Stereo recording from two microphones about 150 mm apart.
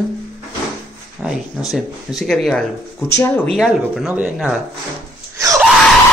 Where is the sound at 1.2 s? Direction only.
Centre (ahead or behind).